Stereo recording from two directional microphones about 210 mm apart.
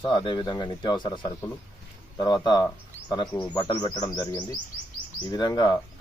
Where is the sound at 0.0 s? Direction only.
20° left (ahead or behind).